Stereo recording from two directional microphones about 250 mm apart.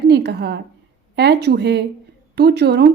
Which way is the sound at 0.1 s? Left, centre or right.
Right.